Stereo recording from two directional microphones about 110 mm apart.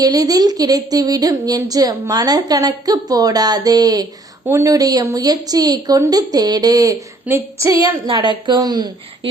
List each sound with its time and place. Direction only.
0.0 s speech: 35° right (ahead or behind)
7.3 s female singing: 25° right (ahead or behind)
8.1 s speech: 40° right (ahead or behind)